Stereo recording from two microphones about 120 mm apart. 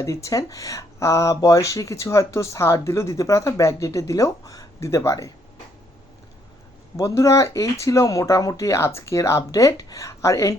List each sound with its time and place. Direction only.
0.0 s speech: 25° left (ahead or behind)
6.9 s speech: 25° left (ahead or behind)